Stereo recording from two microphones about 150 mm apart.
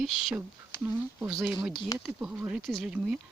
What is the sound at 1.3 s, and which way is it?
Speech, centre (ahead or behind).